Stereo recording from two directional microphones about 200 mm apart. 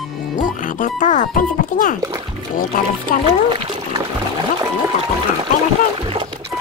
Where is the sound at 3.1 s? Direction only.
45° left (ahead or behind).